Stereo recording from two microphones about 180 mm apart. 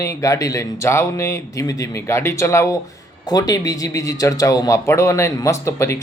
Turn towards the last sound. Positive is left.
turn(degrees=15)  # may be behind; listen again after turning